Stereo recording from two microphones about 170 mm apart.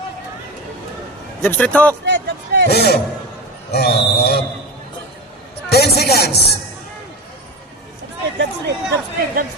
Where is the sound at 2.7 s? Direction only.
70° left (ahead or behind).